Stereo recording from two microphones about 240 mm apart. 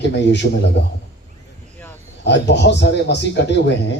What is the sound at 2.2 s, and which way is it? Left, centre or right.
A man's voice, left.